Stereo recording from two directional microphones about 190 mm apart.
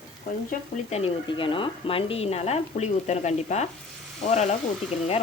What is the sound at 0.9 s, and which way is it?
A woman's voice, 30° left (ahead or behind).